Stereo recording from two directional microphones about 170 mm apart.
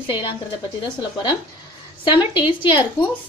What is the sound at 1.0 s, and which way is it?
A woman's voice, 25° left (ahead or behind).